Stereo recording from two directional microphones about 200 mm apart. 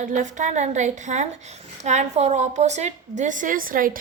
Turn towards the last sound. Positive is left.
turn(degrees=-45)  # may be behind; listen again after turning